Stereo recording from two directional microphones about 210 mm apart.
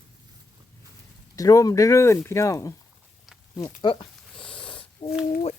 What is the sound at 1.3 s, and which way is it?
Speech, 15° left (ahead or behind).